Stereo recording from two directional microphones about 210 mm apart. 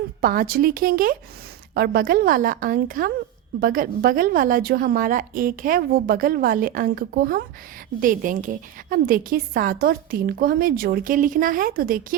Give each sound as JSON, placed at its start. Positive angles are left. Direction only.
{"t": 0.2, "sound": "a woman's voice", "side_deg": -45}